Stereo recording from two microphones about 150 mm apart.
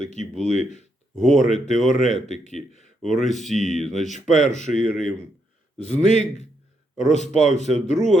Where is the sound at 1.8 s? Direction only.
55° left (ahead or behind).